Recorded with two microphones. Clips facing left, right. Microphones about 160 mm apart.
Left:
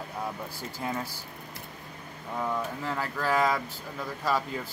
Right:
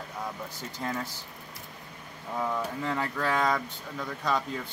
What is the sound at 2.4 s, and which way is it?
Speech, centre (ahead or behind).